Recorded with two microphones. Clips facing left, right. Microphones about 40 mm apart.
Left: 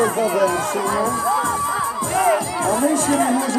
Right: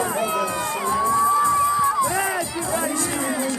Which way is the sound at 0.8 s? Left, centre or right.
Left.